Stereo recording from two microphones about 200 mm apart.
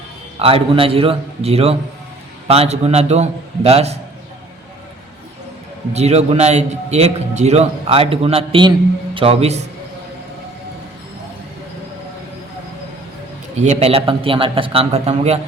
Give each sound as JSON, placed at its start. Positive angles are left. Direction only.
{"t": 0.3, "sound": "a man's voice", "side_deg": -30}
{"t": 5.9, "sound": "a man's voice", "side_deg": -30}
{"t": 13.6, "sound": "a man's voice", "side_deg": -30}